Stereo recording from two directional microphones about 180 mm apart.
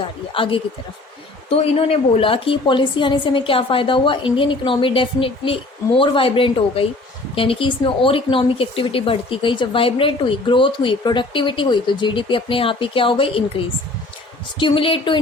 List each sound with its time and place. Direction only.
0.3 s speech: 30° left (ahead or behind)
14.6 s speech: 30° left (ahead or behind)